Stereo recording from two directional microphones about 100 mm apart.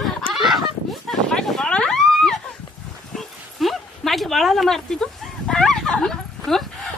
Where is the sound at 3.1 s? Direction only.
Centre (ahead or behind).